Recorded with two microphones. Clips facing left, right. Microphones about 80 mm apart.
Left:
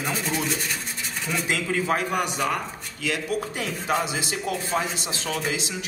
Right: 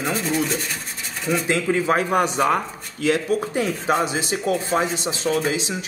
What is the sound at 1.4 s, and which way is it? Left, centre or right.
Speech, right.